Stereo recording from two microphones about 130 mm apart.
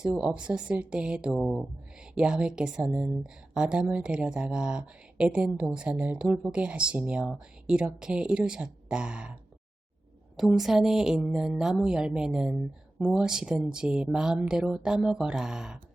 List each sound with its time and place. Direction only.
0.0 s speech: 5° right (ahead or behind)